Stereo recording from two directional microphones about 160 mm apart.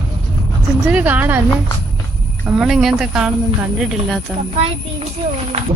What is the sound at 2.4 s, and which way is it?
Speech, 5° right (ahead or behind).